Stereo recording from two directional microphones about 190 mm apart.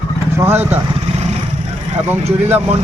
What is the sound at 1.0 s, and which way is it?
Vehicle, 35° right (ahead or behind).